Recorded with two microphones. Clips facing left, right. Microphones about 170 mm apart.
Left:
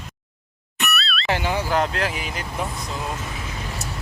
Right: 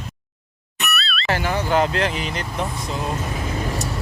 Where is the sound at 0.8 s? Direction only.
Centre (ahead or behind).